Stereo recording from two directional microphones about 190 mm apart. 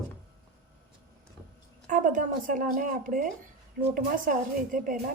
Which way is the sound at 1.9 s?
45° right (ahead or behind).